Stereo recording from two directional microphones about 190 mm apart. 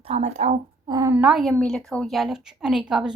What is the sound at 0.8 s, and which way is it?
Speech, 20° right (ahead or behind).